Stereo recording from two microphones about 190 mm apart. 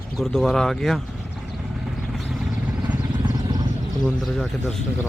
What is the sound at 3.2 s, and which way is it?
Vehicle, 20° right (ahead or behind).